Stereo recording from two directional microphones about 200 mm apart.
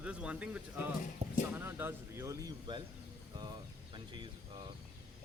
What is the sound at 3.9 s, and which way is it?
Speech, 25° right (ahead or behind).